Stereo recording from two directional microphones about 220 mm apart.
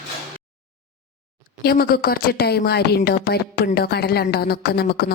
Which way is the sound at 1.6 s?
45° left (ahead or behind).